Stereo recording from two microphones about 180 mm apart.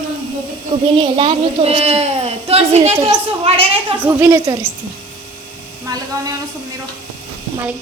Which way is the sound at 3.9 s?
10° right (ahead or behind).